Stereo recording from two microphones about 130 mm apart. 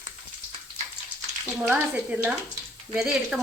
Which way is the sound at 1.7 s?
10° right (ahead or behind).